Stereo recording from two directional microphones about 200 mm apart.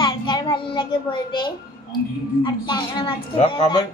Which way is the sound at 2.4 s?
20° left (ahead or behind).